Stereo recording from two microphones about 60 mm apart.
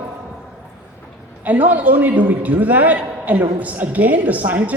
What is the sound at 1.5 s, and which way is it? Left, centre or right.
A woman's voice, right.